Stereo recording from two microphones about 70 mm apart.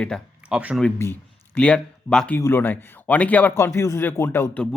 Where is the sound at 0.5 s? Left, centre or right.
Centre.